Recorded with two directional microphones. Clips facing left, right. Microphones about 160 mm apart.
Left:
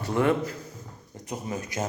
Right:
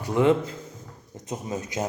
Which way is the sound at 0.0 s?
15° right (ahead or behind).